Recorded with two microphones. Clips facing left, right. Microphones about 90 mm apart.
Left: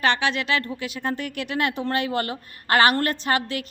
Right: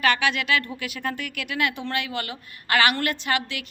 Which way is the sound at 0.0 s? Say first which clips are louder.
Even; 30° left (ahead or behind).